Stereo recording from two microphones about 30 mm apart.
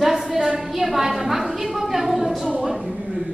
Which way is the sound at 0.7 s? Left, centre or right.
Centre.